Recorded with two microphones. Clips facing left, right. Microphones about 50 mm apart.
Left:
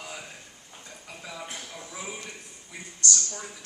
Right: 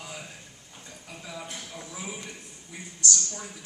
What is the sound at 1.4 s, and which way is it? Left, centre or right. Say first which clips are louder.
Speech: left 1 dB; left.